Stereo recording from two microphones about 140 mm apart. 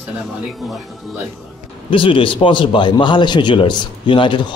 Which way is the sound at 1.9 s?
40° left (ahead or behind).